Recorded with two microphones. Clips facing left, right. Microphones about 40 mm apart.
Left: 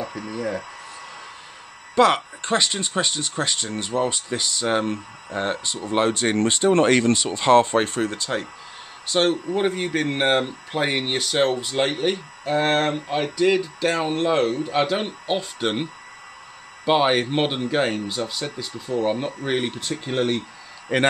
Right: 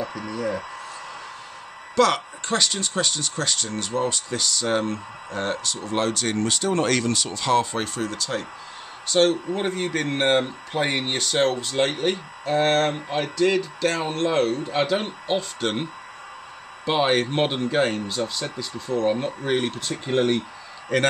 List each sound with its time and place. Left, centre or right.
0.3 s speech: centre
2.0 s speech: centre
9.1 s speech: centre
20.9 s speech: centre